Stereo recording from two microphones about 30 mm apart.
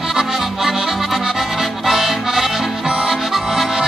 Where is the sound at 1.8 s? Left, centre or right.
Centre.